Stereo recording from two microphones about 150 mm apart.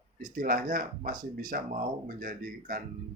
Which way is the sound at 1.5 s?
65° right (ahead or behind).